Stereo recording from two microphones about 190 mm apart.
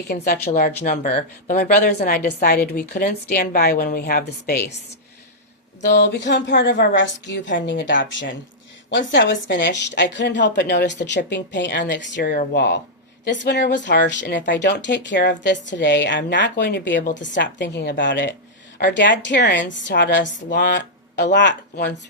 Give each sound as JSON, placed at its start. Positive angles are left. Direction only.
{"t": 0.4, "sound": "a woman's voice", "side_deg": 40}
{"t": 5.8, "sound": "a woman's voice", "side_deg": 65}
{"t": 20.6, "sound": "a sound", "side_deg": 65}
{"t": 21.3, "sound": "a woman's voice", "side_deg": 65}